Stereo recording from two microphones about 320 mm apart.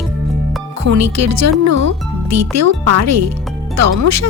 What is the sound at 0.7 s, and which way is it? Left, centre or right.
Speech, right.